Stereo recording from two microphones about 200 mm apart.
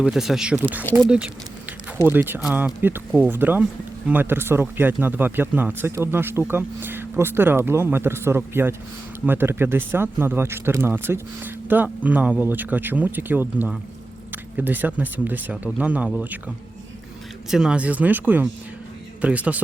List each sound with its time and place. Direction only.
0.0 s speech: centre (ahead or behind)
17.5 s speech: 5° right (ahead or behind)